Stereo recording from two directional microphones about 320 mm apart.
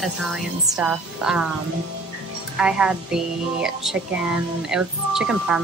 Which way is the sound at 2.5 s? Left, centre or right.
Centre.